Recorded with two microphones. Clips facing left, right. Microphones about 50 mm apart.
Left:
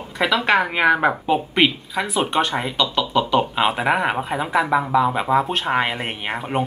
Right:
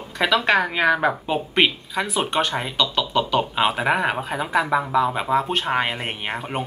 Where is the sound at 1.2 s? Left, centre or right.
Centre.